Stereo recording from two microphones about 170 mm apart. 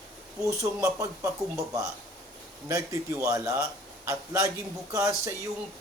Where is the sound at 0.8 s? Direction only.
20° right (ahead or behind).